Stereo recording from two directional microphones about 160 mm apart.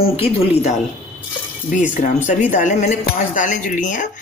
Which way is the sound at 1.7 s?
50° left (ahead or behind).